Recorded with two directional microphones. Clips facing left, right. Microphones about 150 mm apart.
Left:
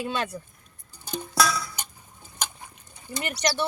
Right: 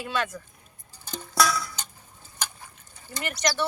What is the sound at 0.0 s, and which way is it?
Speech, 30° left (ahead or behind).